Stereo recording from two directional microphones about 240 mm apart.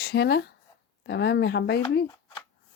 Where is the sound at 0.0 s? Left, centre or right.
Left.